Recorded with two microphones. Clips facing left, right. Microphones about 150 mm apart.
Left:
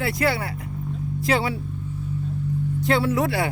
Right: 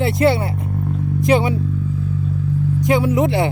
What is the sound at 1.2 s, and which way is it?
Speech, 20° right (ahead or behind).